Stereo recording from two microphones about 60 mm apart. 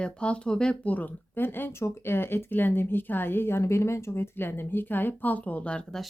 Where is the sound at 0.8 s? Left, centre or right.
Left.